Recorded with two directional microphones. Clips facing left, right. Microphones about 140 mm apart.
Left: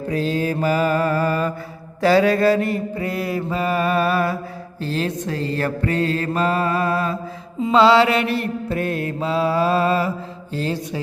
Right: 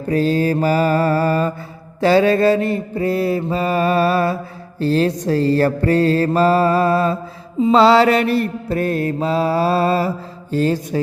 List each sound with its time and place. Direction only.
0.1 s mantra: 40° right (ahead or behind)